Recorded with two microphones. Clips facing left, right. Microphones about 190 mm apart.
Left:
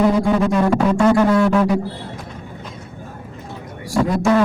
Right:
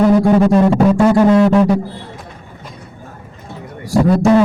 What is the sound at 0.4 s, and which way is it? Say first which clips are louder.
Music: right 5 dB; 35° right (ahead or behind).